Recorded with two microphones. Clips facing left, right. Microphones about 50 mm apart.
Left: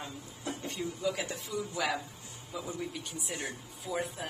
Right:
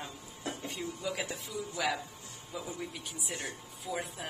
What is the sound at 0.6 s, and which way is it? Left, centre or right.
A woman's voice, centre.